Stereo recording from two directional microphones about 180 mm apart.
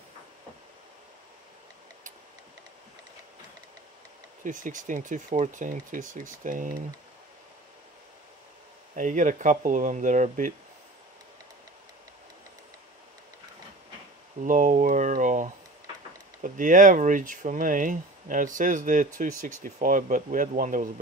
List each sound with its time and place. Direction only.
4.5 s speech: 45° right (ahead or behind)
8.9 s speech: 45° right (ahead or behind)
14.4 s speech: 45° right (ahead or behind)